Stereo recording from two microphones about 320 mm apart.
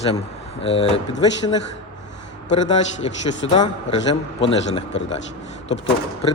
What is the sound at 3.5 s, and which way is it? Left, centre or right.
Speech, centre.